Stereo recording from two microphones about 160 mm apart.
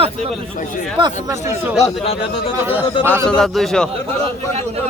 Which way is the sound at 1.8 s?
35° left (ahead or behind).